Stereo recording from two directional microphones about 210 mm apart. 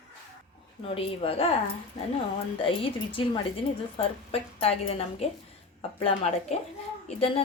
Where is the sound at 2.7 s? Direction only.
25° left (ahead or behind).